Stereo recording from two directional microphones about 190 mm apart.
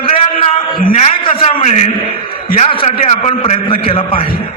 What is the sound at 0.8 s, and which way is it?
Speech, 50° left (ahead or behind).